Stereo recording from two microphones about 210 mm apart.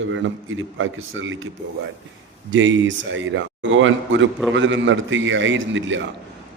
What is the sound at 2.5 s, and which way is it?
A man's voice, 65° right (ahead or behind).